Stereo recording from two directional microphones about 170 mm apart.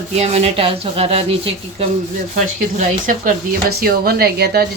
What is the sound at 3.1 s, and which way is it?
Speech, 55° right (ahead or behind).